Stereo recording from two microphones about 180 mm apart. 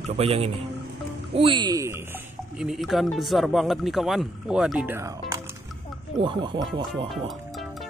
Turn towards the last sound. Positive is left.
turn(degrees=-25)  # may be behind; listen again after turning